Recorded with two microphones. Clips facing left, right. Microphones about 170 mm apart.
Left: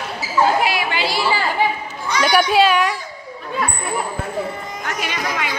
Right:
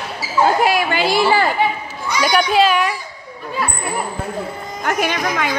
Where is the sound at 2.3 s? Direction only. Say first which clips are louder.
Even; centre (ahead or behind).